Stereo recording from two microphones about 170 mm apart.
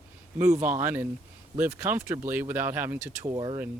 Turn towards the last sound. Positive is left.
turn(degrees=-20)  # may be behind; listen again after turning